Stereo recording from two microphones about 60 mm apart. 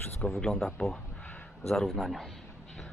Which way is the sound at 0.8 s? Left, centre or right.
Centre.